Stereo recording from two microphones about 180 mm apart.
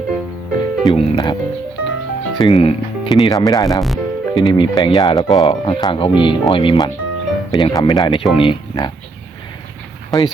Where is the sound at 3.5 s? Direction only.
20° left (ahead or behind).